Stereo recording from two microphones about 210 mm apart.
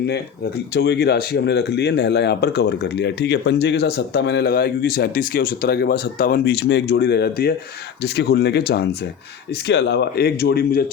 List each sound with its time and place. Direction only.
0.7 s speech: 50° left (ahead or behind)